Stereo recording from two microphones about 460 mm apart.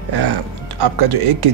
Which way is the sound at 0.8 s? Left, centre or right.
Right.